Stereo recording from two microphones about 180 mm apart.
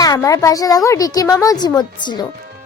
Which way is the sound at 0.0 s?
20° left (ahead or behind).